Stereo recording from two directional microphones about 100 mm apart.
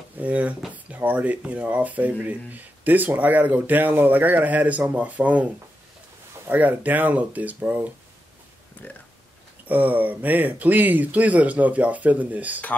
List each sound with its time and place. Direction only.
0.2 s speech: 15° right (ahead or behind)
8.8 s speech: 20° left (ahead or behind)
9.7 s speech: 15° right (ahead or behind)